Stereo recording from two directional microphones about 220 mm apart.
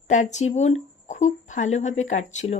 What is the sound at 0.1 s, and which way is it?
Speech, 35° left (ahead or behind).